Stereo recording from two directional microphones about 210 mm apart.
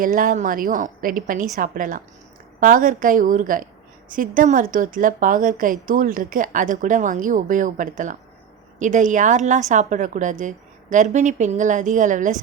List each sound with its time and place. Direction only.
0.0 s a woman's voice: 40° right (ahead or behind)